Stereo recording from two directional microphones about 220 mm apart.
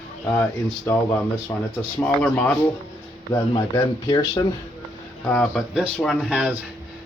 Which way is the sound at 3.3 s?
20° left (ahead or behind).